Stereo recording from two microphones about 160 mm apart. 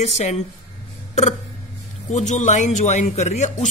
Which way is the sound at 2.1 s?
50° left (ahead or behind).